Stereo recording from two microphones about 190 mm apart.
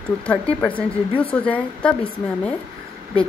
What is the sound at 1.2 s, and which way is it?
Speech, 5° left (ahead or behind).